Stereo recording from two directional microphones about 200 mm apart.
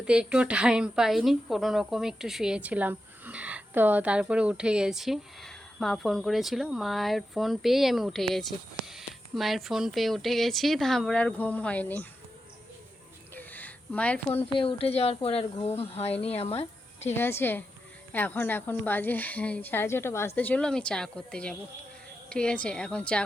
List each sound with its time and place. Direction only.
0.0 s a woman's voice: 5° right (ahead or behind)
13.3 s a sound: 10° left (ahead or behind)
14.3 s speech: 25° left (ahead or behind)
17.2 s a woman's voice: 10° left (ahead or behind)